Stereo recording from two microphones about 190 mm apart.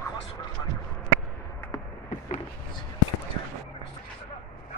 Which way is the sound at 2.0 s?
40° left (ahead or behind).